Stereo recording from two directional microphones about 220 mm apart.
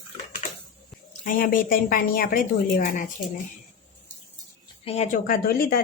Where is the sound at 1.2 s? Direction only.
40° left (ahead or behind).